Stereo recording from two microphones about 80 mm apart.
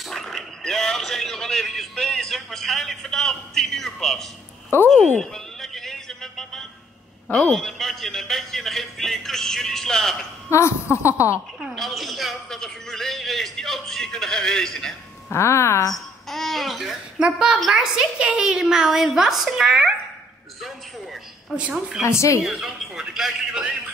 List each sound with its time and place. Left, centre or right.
0.1 s speech: centre
4.8 s a sound: centre
7.3 s a man's voice: centre
10.5 s a woman's voice: left
11.1 s a woman's voice: right
11.7 s a man's voice: centre
15.3 s a woman's voice: left
15.9 s a woman's voice: centre
22.0 s a woman's voice: left
22.4 s a man's voice: centre